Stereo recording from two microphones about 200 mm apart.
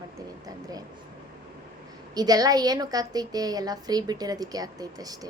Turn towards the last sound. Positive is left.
turn(degrees=-20)  # may be behind; listen again after turning